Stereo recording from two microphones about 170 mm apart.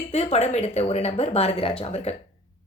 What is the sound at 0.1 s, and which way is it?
Speech, 40° left (ahead or behind).